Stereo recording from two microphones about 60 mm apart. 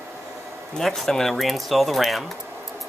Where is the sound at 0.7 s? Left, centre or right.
Centre.